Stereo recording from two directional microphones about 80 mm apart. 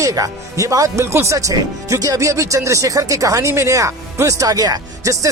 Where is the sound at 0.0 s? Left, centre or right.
Right.